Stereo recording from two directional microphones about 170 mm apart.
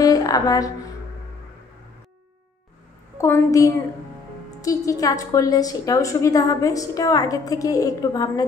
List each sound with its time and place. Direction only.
0.0 s music: 20° left (ahead or behind)
3.2 s a woman's voice: 15° left (ahead or behind)